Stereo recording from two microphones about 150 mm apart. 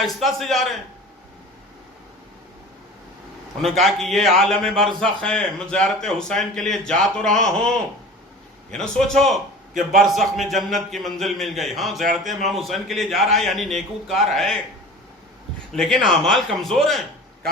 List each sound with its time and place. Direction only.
0.0 s a man's voice: centre (ahead or behind)
3.6 s a man's voice: centre (ahead or behind)
8.7 s a man's voice: 5° left (ahead or behind)
9.7 s a man's voice: 65° right (ahead or behind)
10.1 s a man's voice: centre (ahead or behind)
15.7 s a man's voice: 5° left (ahead or behind)